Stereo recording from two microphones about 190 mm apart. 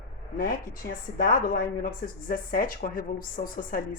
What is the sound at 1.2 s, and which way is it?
A woman's voice, 50° left (ahead or behind).